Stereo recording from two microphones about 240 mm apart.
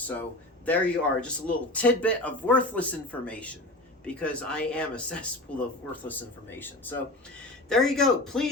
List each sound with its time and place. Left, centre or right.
0.2 s a man's voice: centre